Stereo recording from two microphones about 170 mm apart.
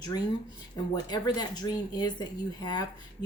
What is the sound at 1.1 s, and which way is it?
Speech, 25° left (ahead or behind).